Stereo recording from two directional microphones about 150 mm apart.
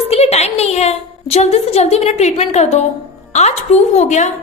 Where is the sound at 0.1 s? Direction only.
45° left (ahead or behind).